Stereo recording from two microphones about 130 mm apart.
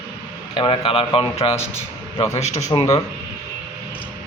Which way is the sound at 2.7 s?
30° left (ahead or behind).